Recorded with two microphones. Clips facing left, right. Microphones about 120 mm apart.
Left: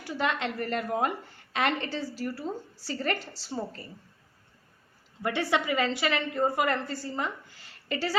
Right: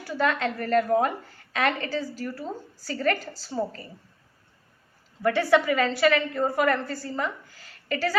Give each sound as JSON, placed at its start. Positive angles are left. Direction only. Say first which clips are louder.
{"t": 0.0, "sound": "a woman's voice", "louder": "right 4 dB", "side_deg": 20}
{"t": 5.2, "sound": "a woman's voice", "louder": "right 7 dB", "side_deg": 25}